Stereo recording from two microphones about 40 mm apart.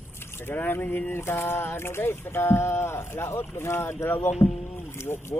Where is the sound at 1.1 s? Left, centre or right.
Left.